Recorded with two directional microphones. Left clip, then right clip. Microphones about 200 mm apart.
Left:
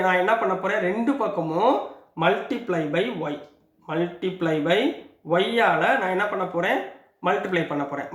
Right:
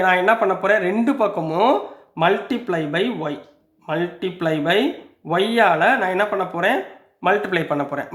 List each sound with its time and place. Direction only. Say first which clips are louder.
0.0 s speech: right 4 dB; 50° right (ahead or behind)